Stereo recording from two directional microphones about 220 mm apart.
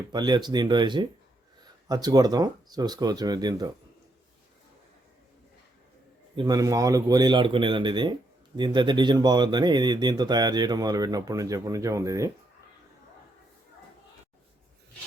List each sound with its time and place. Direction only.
0.1 s speech: 20° right (ahead or behind)
6.3 s speech: 20° right (ahead or behind)